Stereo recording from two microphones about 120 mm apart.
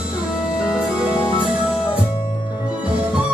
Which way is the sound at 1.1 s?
40° left (ahead or behind).